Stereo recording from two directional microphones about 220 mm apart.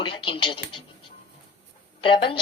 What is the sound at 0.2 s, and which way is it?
Speech, 25° left (ahead or behind).